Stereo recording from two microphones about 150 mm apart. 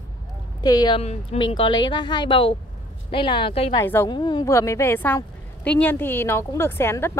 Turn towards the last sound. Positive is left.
turn(degrees=15)  # may be behind; listen again after turning